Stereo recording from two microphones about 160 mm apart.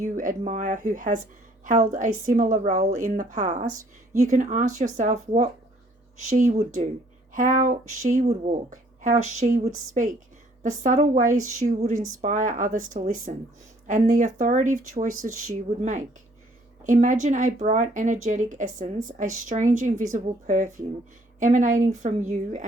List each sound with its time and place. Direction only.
0.0 s speech: 50° right (ahead or behind)
12.2 s speech: 50° right (ahead or behind)